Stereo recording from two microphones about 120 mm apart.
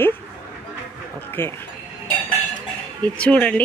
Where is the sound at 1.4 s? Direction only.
20° left (ahead or behind).